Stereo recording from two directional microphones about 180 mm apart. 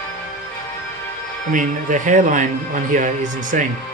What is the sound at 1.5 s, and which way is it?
Speech, 45° right (ahead or behind).